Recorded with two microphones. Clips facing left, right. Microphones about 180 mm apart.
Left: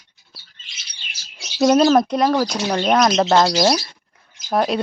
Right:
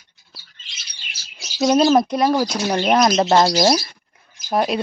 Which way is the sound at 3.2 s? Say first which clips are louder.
Even; 25° right (ahead or behind).